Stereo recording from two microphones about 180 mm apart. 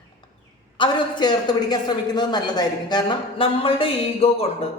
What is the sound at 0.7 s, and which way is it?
A man's voice, 25° left (ahead or behind).